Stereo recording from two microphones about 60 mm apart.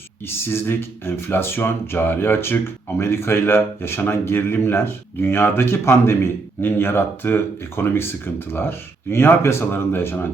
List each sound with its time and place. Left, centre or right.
0.4 s a man's voice: left